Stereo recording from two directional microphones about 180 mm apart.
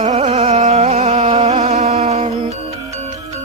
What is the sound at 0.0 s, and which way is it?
Music, 40° right (ahead or behind).